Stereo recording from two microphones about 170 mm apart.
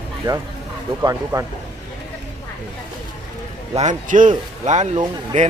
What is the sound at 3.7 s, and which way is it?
A man's voice, 45° right (ahead or behind).